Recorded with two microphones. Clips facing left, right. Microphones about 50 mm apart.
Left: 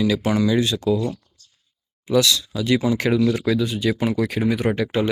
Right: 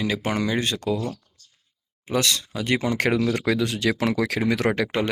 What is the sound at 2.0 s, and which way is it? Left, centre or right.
Speech, right.